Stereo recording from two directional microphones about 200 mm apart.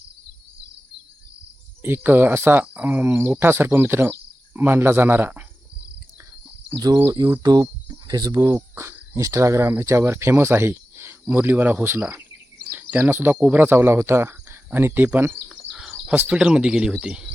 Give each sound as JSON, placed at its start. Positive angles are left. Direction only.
{"t": 1.8, "sound": "speech", "side_deg": -10}
{"t": 6.7, "sound": "speech", "side_deg": -20}